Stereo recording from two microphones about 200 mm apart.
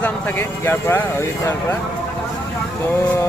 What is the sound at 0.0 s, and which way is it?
Speech, 10° left (ahead or behind).